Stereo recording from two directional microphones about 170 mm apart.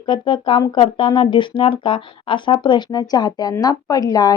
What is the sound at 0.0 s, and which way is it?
Speech, 30° left (ahead or behind).